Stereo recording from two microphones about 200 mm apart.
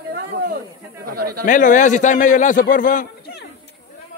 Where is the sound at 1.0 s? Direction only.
50° right (ahead or behind).